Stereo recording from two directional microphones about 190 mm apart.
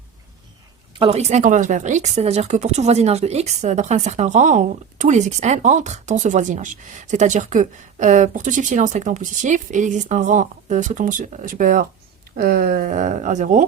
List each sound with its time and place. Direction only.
0.9 s speech: 30° right (ahead or behind)